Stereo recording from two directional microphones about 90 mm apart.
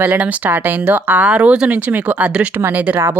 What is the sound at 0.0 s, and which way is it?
Speech, 15° right (ahead or behind).